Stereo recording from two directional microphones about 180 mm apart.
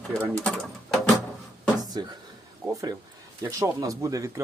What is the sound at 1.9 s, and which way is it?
Speech, 25° right (ahead or behind).